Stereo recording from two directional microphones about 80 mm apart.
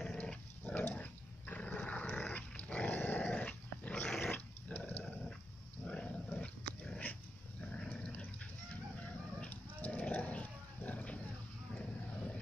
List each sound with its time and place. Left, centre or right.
0.0 s dog: centre